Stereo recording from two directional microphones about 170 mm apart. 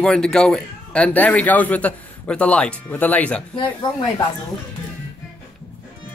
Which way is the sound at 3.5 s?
25° left (ahead or behind).